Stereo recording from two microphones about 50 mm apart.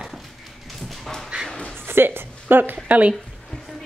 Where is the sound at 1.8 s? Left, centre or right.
Right.